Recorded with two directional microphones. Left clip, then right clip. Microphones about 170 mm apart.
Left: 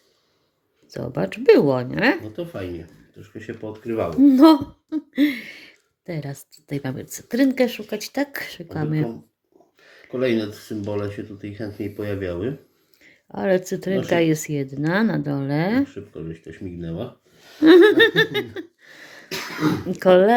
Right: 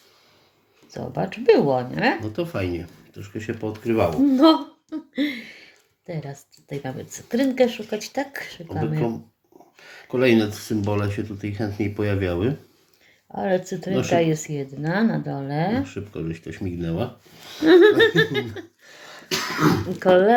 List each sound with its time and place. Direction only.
0.9 s hoot: 45° left (ahead or behind)
2.2 s speech: 35° right (ahead or behind)
4.2 s hoot: 35° left (ahead or behind)
10.1 s speech: 40° right (ahead or behind)
13.3 s hoot: 45° left (ahead or behind)
15.9 s speech: 40° right (ahead or behind)
17.6 s laughter: 40° left (ahead or behind)
19.9 s laughter: 40° left (ahead or behind)